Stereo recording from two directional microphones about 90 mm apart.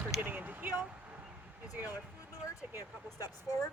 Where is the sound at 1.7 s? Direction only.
15° right (ahead or behind).